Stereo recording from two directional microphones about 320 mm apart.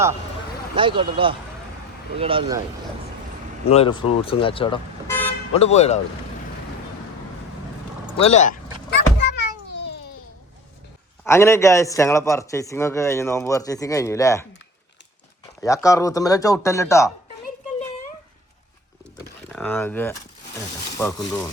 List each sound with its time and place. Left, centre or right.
0.8 s speech: centre
3.7 s speech: centre
5.5 s speech: centre
8.2 s power windows: left
11.3 s a man's voice: centre
15.6 s a man's voice: centre
19.5 s a man's voice: centre